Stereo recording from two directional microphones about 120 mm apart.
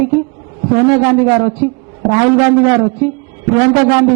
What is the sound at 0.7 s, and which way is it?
A man's voice, 20° right (ahead or behind).